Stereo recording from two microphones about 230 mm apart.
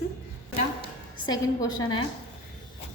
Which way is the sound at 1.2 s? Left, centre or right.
Centre.